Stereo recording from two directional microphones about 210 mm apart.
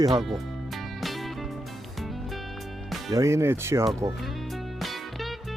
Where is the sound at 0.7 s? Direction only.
Centre (ahead or behind).